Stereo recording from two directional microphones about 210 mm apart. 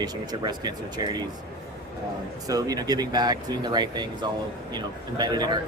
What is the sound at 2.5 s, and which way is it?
Speech, 20° right (ahead or behind).